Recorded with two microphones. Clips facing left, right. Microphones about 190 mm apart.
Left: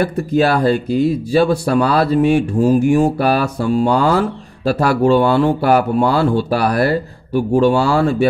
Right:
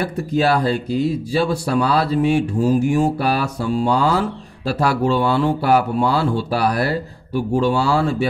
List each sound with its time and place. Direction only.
0.0 s speech: 55° left (ahead or behind)